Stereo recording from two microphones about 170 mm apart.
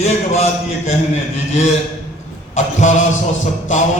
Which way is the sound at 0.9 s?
40° left (ahead or behind).